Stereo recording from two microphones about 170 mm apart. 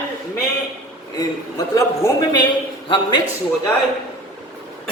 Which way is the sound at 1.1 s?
20° left (ahead or behind).